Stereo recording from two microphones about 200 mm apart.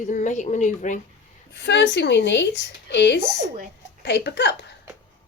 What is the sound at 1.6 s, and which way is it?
A woman's voice, 60° left (ahead or behind).